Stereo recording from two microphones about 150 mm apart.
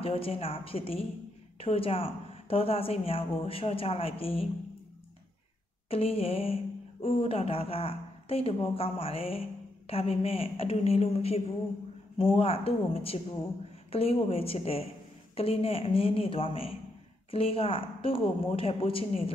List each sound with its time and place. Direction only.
0.0 s speech: 40° left (ahead or behind)
5.9 s speech: 40° left (ahead or behind)